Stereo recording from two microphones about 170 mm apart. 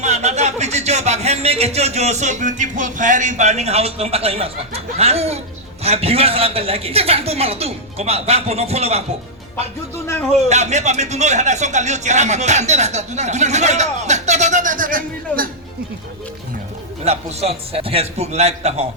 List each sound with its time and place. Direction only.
0.0 s a man's voice: 40° right (ahead or behind)
10.5 s speech: 40° right (ahead or behind)
17.0 s a man's voice: 40° right (ahead or behind)